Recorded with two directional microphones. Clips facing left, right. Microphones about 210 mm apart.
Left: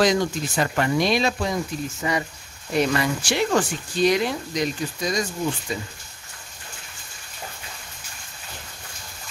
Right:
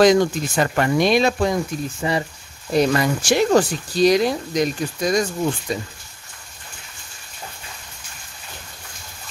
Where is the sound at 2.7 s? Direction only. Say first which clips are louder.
Right 4 dB; 40° right (ahead or behind).